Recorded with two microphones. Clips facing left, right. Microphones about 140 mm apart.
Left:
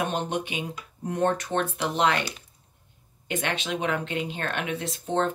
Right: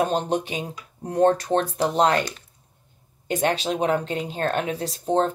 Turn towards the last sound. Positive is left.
turn(degrees=-35)  # may be behind; listen again after turning